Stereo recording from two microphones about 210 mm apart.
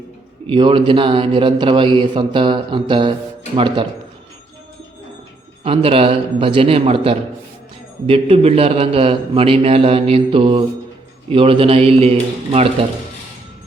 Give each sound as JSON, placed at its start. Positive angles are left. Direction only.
{"t": 0.4, "sound": "a man's voice", "side_deg": -25}
{"t": 5.6, "sound": "a man's voice", "side_deg": -25}